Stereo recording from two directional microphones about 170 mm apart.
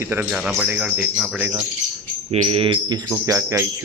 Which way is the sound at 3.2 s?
15° right (ahead or behind).